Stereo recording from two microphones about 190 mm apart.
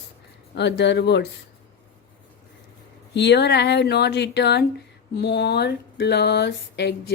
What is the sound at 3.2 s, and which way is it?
Speech, 65° left (ahead or behind).